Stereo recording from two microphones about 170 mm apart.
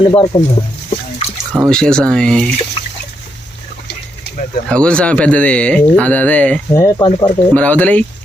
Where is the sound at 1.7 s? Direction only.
5° left (ahead or behind).